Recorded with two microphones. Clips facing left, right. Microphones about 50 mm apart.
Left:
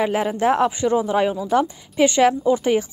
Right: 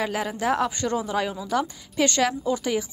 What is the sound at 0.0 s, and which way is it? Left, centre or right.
Speech, left.